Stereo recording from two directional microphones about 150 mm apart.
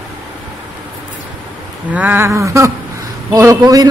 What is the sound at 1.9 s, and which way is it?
Speech, 10° right (ahead or behind).